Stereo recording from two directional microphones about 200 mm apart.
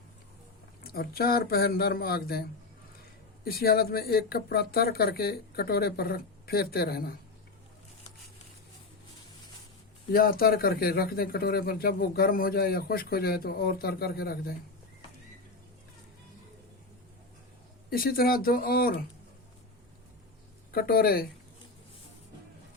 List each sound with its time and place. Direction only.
0.9 s speech: 50° left (ahead or behind)
3.4 s speech: 50° left (ahead or behind)
10.1 s speech: 45° left (ahead or behind)
17.9 s speech: 45° left (ahead or behind)
20.7 s speech: 50° left (ahead or behind)